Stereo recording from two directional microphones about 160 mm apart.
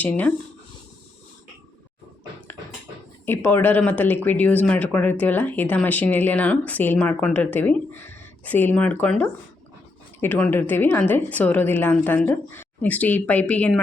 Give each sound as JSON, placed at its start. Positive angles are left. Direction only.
{"t": 0.0, "sound": "speech", "side_deg": 10}
{"t": 3.2, "sound": "speech", "side_deg": 15}